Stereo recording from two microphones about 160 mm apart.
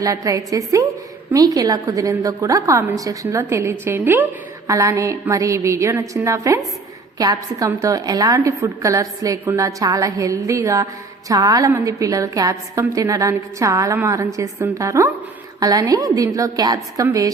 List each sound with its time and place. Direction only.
0.0 s a woman's voice: 20° right (ahead or behind)